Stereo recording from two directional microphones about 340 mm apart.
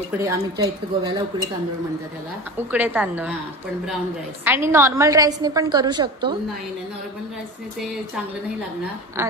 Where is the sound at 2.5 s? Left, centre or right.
Centre.